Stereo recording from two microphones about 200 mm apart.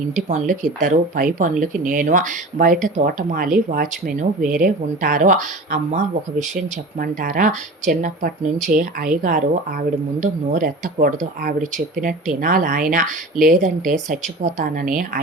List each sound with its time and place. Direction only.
0.3 s speech: 35° right (ahead or behind)
7.0 s speech: 45° right (ahead or behind)